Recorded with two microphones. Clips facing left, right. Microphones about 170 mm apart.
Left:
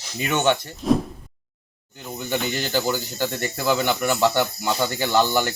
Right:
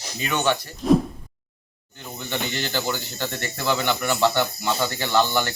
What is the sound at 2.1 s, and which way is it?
Speech, 10° left (ahead or behind).